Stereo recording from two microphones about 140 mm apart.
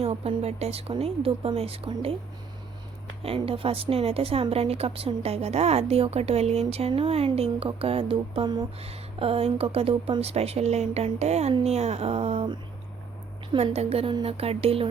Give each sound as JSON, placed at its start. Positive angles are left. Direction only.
{"t": 0.0, "sound": "a woman's voice", "side_deg": -45}
{"t": 3.2, "sound": "a woman's voice", "side_deg": -40}
{"t": 13.6, "sound": "a woman's voice", "side_deg": -45}